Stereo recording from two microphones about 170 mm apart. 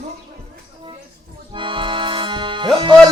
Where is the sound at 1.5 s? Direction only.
30° right (ahead or behind).